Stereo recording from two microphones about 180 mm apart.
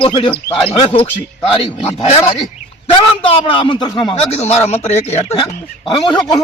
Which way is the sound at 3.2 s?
30° left (ahead or behind).